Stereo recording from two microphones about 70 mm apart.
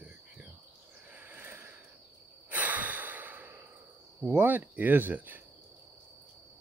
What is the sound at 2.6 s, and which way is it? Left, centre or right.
Sigh, right.